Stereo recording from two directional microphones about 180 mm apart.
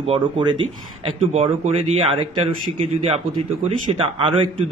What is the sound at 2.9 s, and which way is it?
A man's voice, 35° right (ahead or behind).